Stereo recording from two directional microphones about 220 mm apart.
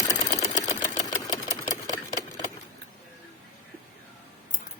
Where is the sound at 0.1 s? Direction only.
15° left (ahead or behind).